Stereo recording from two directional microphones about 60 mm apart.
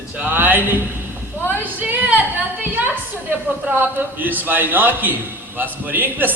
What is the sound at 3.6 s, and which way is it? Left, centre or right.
A man's voice, right.